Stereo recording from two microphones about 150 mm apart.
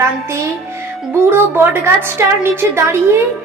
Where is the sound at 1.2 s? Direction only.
15° right (ahead or behind).